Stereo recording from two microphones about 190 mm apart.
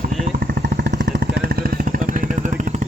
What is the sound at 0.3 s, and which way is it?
Vehicle, 55° right (ahead or behind).